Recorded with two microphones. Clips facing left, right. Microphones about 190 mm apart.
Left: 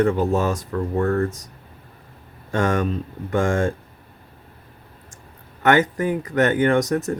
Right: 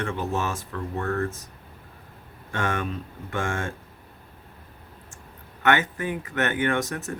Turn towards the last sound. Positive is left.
turn(degrees=40)  # may be behind; listen again after turning